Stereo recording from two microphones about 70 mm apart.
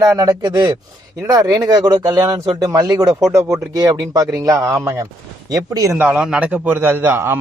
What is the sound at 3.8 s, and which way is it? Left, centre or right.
Speech, right.